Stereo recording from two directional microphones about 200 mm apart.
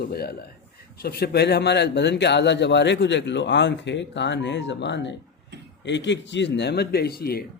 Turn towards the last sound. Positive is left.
turn(degrees=50)  # may be behind; listen again after turning